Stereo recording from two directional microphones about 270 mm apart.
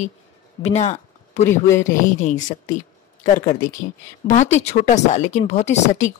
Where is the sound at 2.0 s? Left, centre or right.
Left.